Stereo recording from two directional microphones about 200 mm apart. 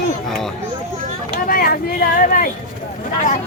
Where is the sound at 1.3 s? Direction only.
45° left (ahead or behind).